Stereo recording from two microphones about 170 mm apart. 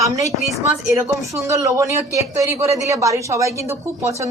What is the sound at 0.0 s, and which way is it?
A woman's voice, 20° right (ahead or behind).